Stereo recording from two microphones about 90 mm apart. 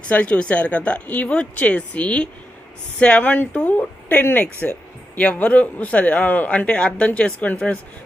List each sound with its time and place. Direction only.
0.1 s speech: 15° left (ahead or behind)